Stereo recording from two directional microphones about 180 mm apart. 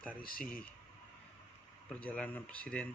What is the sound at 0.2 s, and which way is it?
Speech, 50° left (ahead or behind).